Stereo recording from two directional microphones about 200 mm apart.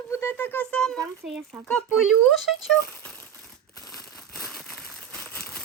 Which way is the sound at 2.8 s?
10° left (ahead or behind).